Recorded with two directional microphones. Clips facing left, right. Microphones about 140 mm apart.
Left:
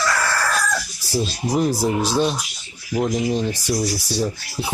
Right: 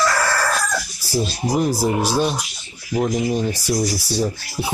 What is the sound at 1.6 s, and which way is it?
Speech, 5° right (ahead or behind).